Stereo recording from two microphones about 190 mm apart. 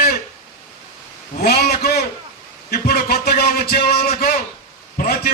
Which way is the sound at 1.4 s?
55° left (ahead or behind).